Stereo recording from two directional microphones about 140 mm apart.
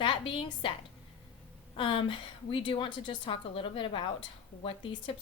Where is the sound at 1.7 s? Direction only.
35° left (ahead or behind).